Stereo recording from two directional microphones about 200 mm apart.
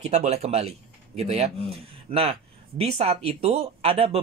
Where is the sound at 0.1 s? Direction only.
35° right (ahead or behind).